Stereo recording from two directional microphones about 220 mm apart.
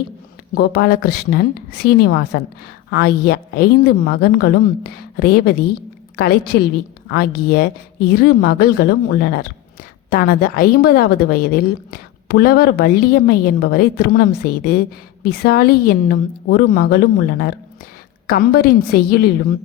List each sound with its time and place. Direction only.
0.5 s a woman's voice: 45° left (ahead or behind)